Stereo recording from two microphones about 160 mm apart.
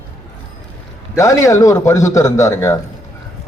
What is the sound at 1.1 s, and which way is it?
A man's voice, 20° left (ahead or behind).